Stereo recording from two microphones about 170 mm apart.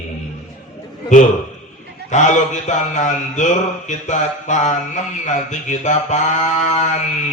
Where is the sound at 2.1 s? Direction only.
45° left (ahead or behind).